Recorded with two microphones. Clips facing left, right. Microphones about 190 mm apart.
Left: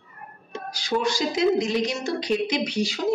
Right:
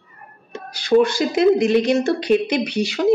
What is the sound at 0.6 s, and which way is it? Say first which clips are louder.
A woman's voice: right 10 dB; 60° right (ahead or behind).